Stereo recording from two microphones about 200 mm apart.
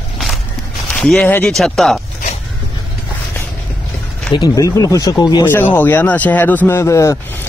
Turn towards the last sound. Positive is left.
turn(degrees=15)  # may be behind; listen again after turning